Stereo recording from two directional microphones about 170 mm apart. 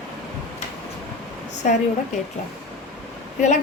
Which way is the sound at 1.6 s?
45° left (ahead or behind).